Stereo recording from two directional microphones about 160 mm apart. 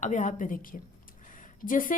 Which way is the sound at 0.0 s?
50° left (ahead or behind).